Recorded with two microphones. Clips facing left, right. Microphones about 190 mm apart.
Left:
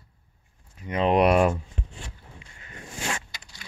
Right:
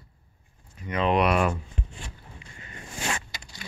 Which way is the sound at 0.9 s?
35° left (ahead or behind).